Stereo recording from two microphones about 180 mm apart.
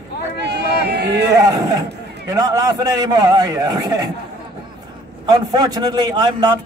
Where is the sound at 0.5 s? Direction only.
65° right (ahead or behind).